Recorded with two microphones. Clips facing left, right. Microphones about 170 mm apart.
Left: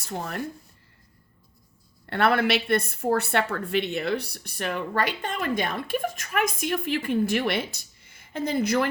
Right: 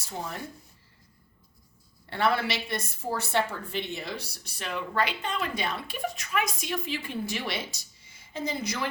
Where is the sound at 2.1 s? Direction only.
55° left (ahead or behind).